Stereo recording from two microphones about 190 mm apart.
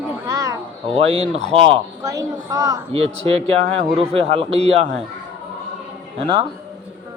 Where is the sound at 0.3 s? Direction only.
20° right (ahead or behind).